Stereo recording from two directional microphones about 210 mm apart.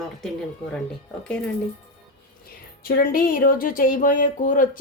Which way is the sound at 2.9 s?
45° left (ahead or behind).